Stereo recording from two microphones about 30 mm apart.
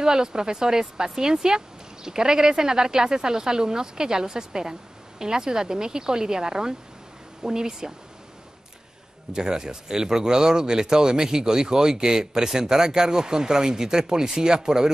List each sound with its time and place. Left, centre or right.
0.0 s a man's voice: right
9.3 s a man's voice: right